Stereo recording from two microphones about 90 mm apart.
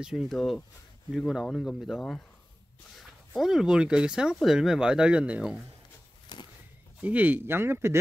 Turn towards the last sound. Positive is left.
turn(degrees=-30)  # may be behind; listen again after turning